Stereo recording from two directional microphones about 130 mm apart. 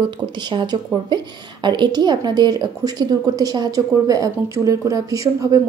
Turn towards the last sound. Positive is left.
turn(degrees=-25)  # may be behind; listen again after turning